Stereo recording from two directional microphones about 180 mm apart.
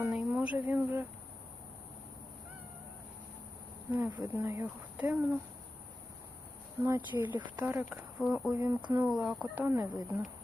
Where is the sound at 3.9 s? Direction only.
15° right (ahead or behind).